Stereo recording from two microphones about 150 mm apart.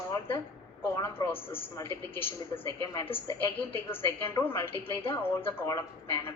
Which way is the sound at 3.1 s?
40° left (ahead or behind).